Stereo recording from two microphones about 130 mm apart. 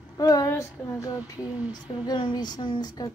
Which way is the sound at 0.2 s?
30° left (ahead or behind).